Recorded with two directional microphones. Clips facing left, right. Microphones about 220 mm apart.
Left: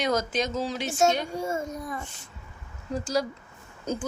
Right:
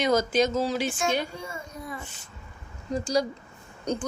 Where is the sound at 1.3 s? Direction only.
45° left (ahead or behind).